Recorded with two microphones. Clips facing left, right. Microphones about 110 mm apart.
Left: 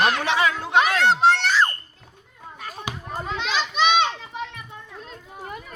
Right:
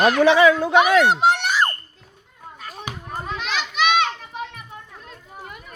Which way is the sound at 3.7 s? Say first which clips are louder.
Even; 25° left (ahead or behind).